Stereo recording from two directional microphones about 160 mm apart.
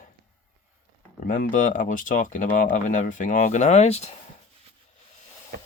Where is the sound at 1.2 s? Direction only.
60° left (ahead or behind); by 4.1 s 40° left (ahead or behind).